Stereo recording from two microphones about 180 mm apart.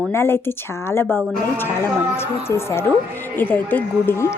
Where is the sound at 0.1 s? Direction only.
15° left (ahead or behind).